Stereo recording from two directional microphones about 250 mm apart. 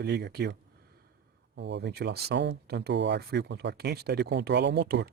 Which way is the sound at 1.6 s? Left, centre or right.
Right.